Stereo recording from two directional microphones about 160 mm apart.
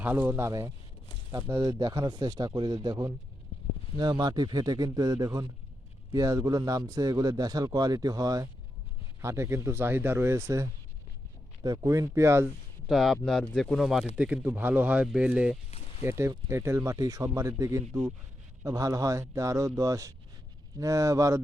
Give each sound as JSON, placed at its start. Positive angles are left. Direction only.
{"t": 0.0, "sound": "a man's voice", "side_deg": -10}
{"t": 12.9, "sound": "a man's voice", "side_deg": 0}